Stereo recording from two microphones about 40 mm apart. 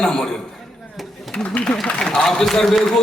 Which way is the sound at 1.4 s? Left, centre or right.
Left.